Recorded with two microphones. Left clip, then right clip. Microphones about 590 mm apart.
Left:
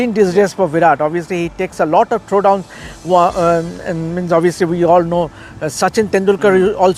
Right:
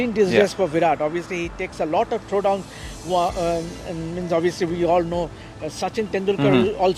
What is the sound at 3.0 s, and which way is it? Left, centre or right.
Speech, centre.